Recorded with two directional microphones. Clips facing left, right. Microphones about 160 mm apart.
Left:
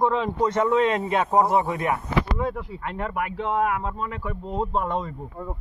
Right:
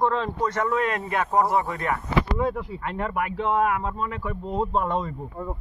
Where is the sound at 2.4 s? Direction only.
5° right (ahead or behind).